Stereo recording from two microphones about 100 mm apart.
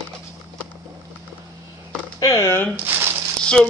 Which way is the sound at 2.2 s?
35° left (ahead or behind).